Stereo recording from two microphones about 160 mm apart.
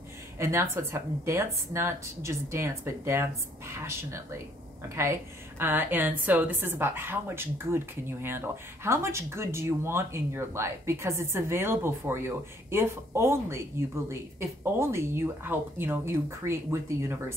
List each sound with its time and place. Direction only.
0.4 s a woman's voice: 15° right (ahead or behind)
5.6 s a woman's voice: 15° right (ahead or behind)